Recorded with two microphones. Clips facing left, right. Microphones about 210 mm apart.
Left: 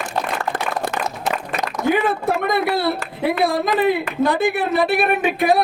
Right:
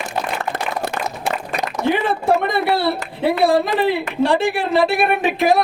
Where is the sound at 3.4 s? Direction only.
30° right (ahead or behind).